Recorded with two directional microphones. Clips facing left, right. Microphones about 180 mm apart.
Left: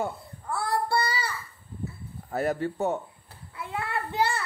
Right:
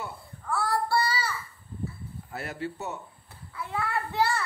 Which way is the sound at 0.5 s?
20° left (ahead or behind).